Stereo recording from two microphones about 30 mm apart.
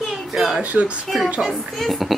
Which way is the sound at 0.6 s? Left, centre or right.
Right.